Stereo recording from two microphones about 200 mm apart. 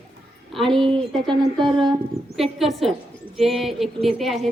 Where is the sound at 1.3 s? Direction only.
25° right (ahead or behind).